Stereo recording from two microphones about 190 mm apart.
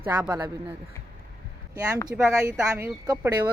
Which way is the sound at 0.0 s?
10° right (ahead or behind).